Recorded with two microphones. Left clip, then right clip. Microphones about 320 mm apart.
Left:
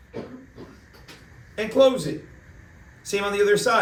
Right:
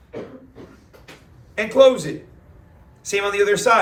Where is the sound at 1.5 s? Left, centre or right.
Right.